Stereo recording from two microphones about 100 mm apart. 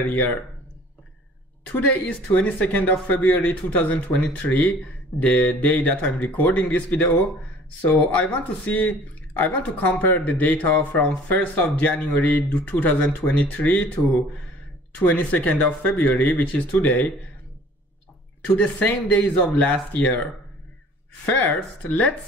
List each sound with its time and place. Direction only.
1.7 s speech: 15° left (ahead or behind)
15.0 s speech: 15° left (ahead or behind)
18.4 s speech: 15° left (ahead or behind)
21.3 s speech: 15° left (ahead or behind)